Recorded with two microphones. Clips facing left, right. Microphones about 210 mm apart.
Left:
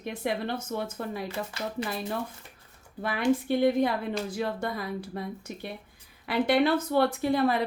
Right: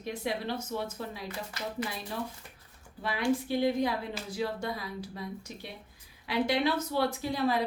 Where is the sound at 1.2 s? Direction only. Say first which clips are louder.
Left 4 dB; 25° left (ahead or behind).